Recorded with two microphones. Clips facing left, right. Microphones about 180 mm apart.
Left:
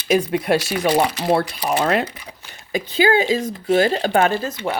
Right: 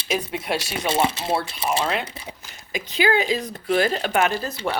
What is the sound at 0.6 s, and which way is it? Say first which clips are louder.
Speech: left 4 dB; 25° right (ahead or behind).